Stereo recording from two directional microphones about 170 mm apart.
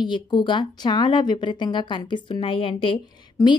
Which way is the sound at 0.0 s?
25° left (ahead or behind).